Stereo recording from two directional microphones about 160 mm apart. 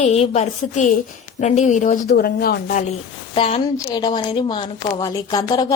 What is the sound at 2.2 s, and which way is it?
Speech, 75° left (ahead or behind).